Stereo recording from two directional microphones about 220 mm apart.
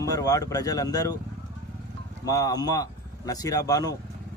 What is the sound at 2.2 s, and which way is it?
Speech, 15° left (ahead or behind).